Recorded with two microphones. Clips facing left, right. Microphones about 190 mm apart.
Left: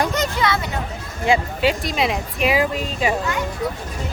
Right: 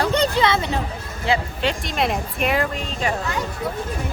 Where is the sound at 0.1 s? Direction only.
30° right (ahead or behind).